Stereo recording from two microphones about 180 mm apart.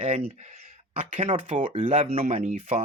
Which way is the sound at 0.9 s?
35° right (ahead or behind).